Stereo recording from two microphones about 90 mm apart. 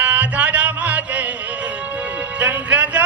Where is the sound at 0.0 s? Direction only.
15° right (ahead or behind).